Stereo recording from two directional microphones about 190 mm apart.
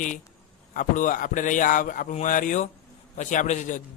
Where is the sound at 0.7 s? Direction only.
45° left (ahead or behind).